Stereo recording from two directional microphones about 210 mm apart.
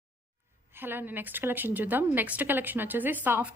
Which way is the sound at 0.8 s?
10° right (ahead or behind).